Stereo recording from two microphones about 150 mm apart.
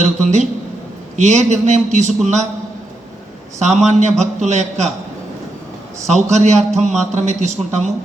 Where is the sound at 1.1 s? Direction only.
50° right (ahead or behind).